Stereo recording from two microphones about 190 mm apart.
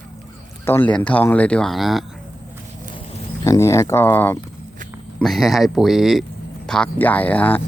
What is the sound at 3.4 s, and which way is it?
Speech, 15° left (ahead or behind).